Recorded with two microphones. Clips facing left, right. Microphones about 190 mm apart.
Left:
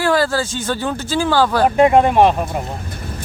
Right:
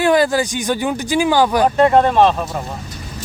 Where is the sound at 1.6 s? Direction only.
15° left (ahead or behind).